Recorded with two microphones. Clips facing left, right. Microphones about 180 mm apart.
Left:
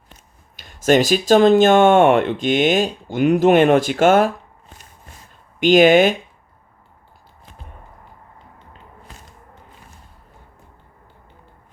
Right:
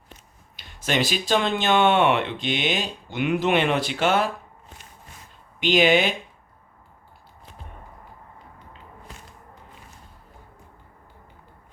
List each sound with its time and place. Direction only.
0.5 s speech: 45° left (ahead or behind)
5.5 s speech: 45° left (ahead or behind)